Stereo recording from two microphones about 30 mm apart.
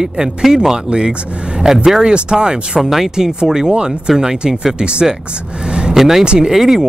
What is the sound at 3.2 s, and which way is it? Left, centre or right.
Speech, right.